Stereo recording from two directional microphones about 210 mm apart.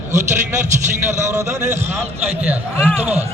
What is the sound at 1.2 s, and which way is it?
A man's voice, 15° right (ahead or behind).